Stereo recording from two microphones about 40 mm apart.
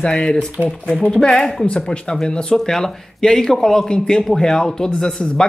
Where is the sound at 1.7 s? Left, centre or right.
Left.